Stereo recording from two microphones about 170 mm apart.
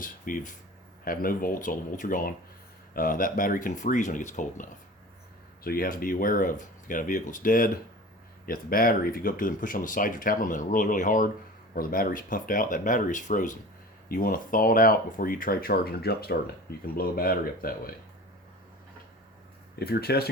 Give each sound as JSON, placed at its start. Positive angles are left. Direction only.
{"t": 0.0, "sound": "speech", "side_deg": 55}
{"t": 19.8, "sound": "speech", "side_deg": 65}